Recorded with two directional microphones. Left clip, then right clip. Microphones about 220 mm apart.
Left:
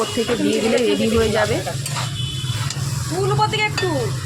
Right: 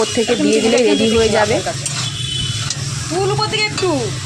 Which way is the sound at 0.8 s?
20° right (ahead or behind).